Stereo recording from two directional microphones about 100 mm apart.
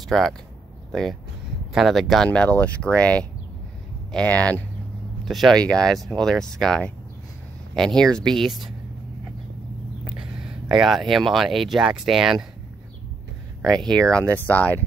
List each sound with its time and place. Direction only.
0.1 s speech: 5° left (ahead or behind)
1.7 s speech: centre (ahead or behind); by 4.6 s 15° left (ahead or behind)
5.2 s speech: centre (ahead or behind)
10.1 s speech: 5° right (ahead or behind)
13.6 s speech: 5° left (ahead or behind)